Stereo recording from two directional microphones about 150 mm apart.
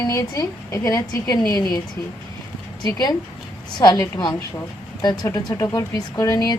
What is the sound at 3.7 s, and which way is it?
A woman's voice, 25° left (ahead or behind).